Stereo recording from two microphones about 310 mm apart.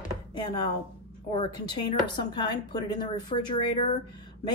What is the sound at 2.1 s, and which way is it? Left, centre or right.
Speech, centre.